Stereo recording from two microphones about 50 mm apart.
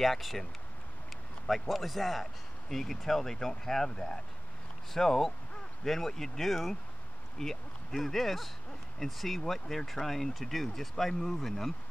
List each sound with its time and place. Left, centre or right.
0.0 s speech: centre
1.5 s speech: centre